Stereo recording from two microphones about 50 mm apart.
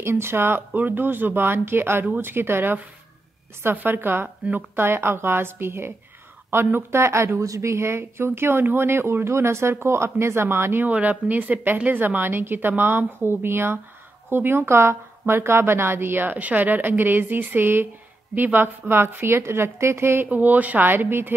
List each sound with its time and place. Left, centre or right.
0.0 s a woman's voice: right
2.0 s a woman's voice: right
2.3 s a woman's voice: right
7.3 s speech: right
10.9 s a woman's voice: right
20.2 s a woman's voice: right